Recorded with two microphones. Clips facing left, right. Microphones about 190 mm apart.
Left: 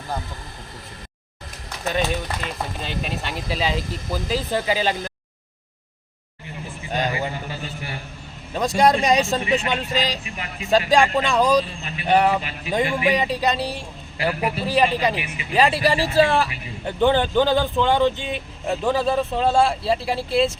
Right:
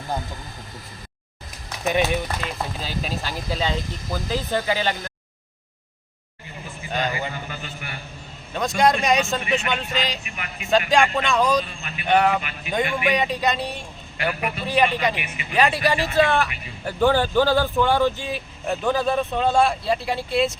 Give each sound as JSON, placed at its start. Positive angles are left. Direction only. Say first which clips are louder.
{"t": 1.8, "sound": "speech", "louder": "right 2 dB", "side_deg": -10}
{"t": 4.6, "sound": "speech", "louder": "left 2 dB", "side_deg": 15}
{"t": 6.9, "sound": "a man's voice", "louder": "left 2 dB", "side_deg": 35}
{"t": 17.0, "sound": "speech", "louder": "left 1 dB", "side_deg": 20}
{"t": 18.7, "sound": "speech", "louder": "left 1 dB", "side_deg": 0}
{"t": 18.9, "sound": "a man's voice", "louder": "left 1 dB", "side_deg": 30}